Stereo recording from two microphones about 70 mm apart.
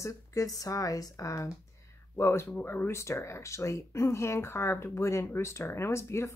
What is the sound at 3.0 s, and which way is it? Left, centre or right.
Speech, left.